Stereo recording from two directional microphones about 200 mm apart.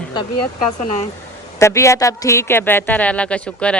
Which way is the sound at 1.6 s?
15° left (ahead or behind).